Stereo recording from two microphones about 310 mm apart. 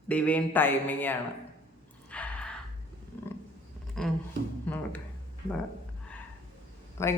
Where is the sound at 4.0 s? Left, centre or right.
Centre.